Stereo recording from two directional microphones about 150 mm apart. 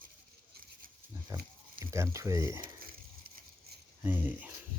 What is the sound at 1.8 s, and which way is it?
Speech, 20° right (ahead or behind).